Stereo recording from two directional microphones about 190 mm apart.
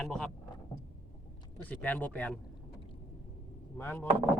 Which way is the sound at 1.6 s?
10° left (ahead or behind).